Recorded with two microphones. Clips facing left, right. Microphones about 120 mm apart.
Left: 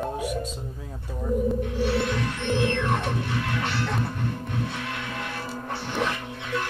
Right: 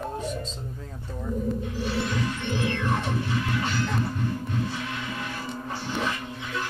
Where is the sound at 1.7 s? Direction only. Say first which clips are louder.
Left 3 dB; 60° left (ahead or behind).